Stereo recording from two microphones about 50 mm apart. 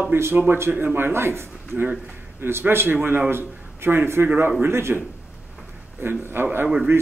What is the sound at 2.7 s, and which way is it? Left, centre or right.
A man's voice, right.